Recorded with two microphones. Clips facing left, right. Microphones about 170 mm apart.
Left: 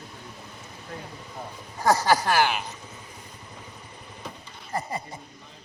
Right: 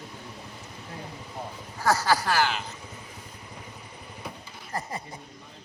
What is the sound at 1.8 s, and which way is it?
Speech, 15° left (ahead or behind).